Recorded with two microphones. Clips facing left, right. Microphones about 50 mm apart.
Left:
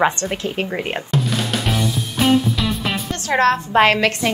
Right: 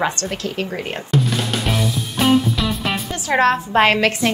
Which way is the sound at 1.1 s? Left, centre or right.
Centre.